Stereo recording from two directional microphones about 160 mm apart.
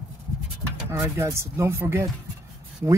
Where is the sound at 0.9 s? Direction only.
20° right (ahead or behind).